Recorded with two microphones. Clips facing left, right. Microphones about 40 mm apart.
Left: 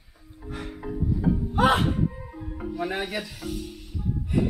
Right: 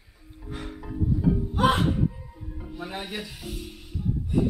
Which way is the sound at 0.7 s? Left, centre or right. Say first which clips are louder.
Right 1 dB; centre.